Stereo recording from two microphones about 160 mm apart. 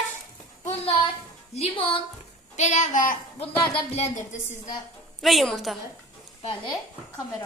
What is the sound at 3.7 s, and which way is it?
Speech, 40° left (ahead or behind).